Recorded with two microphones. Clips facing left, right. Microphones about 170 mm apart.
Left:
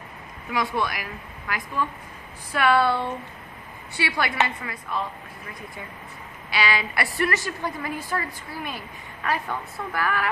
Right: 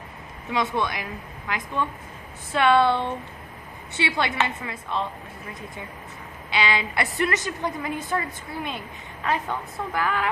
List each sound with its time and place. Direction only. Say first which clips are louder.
0.5 s a woman's voice: right 1 dB; 20° right (ahead or behind)
6.5 s a woman's voice: right 1 dB; 20° right (ahead or behind)